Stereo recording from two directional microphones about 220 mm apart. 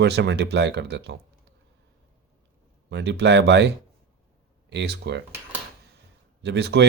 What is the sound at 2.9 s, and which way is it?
Speech, 50° right (ahead or behind).